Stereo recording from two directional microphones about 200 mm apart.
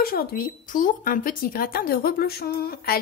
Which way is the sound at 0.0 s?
50° left (ahead or behind).